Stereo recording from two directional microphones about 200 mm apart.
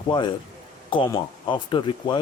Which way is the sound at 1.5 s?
20° left (ahead or behind).